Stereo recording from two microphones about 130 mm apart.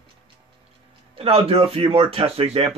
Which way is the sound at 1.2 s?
50° right (ahead or behind).